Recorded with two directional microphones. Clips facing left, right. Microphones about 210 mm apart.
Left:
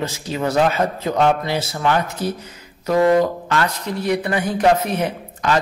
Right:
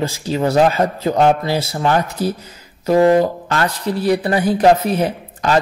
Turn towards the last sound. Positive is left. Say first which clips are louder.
# right 3 dB
turn(degrees=-35)  # may be behind; listen again after turning